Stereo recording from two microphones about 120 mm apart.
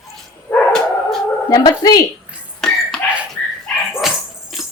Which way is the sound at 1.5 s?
35° left (ahead or behind).